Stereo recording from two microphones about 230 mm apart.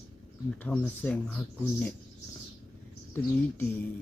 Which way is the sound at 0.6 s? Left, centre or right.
Centre.